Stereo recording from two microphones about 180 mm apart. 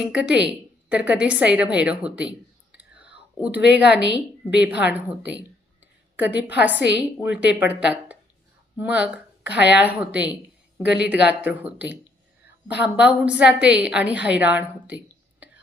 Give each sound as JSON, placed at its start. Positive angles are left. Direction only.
{"t": 0.0, "sound": "a woman's voice", "side_deg": -5}
{"t": 2.7, "sound": "whispering", "side_deg": -5}
{"t": 3.8, "sound": "a woman's voice", "side_deg": 70}
{"t": 4.5, "sound": "a woman's voice", "side_deg": -5}